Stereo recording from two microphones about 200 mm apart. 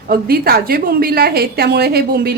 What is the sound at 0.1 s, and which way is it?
A woman's voice, 50° right (ahead or behind).